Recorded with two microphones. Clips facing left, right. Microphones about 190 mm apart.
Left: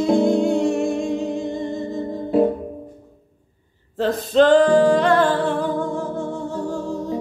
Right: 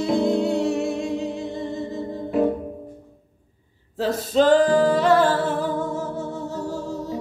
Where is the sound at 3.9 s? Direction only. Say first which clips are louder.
Left 3 dB; 5° right (ahead or behind).